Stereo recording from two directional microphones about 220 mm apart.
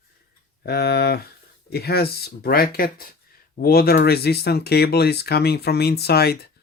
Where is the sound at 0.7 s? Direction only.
45° left (ahead or behind).